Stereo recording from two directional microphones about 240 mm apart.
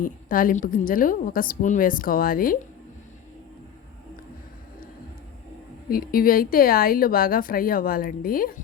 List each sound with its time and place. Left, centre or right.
0.0 s a woman's voice: left
5.9 s a woman's voice: left